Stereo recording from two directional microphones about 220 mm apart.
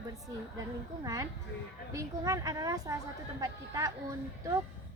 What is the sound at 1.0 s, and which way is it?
A woman's voice, 15° right (ahead or behind).